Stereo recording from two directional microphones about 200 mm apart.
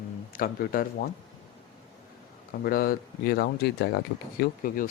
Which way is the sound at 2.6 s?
45° left (ahead or behind).